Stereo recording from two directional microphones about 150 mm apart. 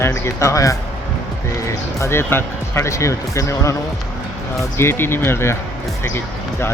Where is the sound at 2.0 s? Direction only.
15° left (ahead or behind).